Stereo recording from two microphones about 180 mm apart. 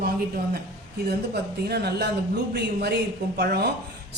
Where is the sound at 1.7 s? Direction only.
65° right (ahead or behind).